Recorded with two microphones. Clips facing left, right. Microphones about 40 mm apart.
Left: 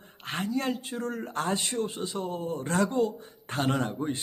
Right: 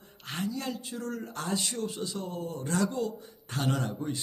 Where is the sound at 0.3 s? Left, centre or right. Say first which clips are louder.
Left 4 dB; left.